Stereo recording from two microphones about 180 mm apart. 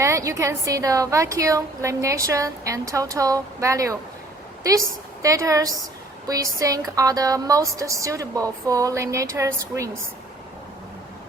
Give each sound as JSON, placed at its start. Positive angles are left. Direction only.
{"t": 0.0, "sound": "a woman's voice", "side_deg": -15}